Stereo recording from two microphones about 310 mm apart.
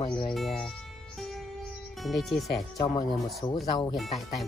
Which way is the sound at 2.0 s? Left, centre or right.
Centre.